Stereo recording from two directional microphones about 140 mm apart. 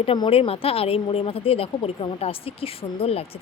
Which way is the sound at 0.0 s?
40° left (ahead or behind).